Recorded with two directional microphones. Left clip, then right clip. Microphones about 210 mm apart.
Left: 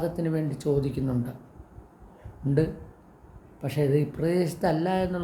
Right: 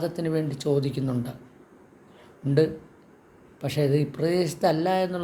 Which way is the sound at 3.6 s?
5° left (ahead or behind).